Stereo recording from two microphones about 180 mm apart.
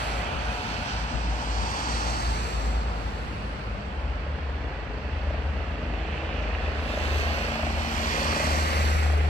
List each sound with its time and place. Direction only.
8.1 s vehicle: 50° left (ahead or behind)